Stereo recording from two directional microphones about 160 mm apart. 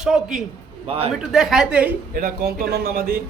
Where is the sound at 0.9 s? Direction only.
40° right (ahead or behind).